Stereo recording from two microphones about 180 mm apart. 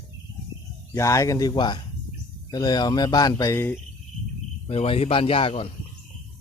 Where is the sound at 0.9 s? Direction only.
15° left (ahead or behind).